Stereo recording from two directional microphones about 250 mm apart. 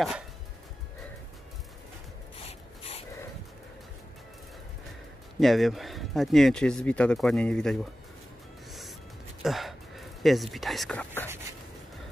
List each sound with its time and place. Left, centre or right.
2.3 s a sound: left
5.4 s speech: centre
9.4 s speech: centre